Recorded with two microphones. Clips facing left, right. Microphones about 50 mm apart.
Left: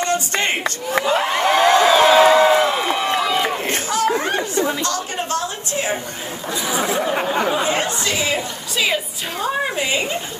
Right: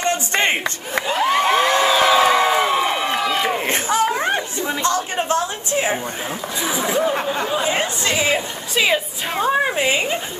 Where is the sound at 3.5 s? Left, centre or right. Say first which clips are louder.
Right 2 dB; right.